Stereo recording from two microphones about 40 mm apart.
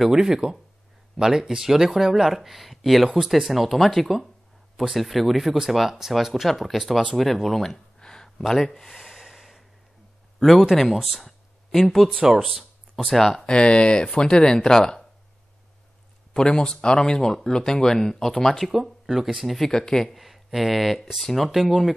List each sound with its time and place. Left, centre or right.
0.1 s speech: centre
8.0 s a sound: centre
8.4 s gasp: centre
10.8 s speech: centre
12.4 s a sound: centre
13.1 s speech: centre
13.4 s speech: left
16.3 s speech: centre
18.7 s speech: centre
19.7 s speech: centre
20.1 s speech: centre